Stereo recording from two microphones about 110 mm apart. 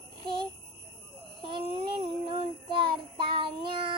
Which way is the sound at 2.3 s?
45° right (ahead or behind).